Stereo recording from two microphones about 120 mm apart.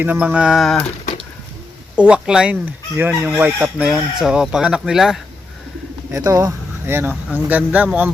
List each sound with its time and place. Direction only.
0.0 s speech: 15° right (ahead or behind); by 0.8 s centre (ahead or behind)
0.9 s a sound: 60° left (ahead or behind)
2.0 s speech: 10° right (ahead or behind)
6.1 s speech: 30° right (ahead or behind); by 8.1 s 15° right (ahead or behind)